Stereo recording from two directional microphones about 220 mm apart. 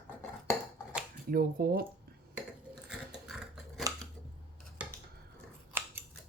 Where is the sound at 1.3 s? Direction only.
40° right (ahead or behind).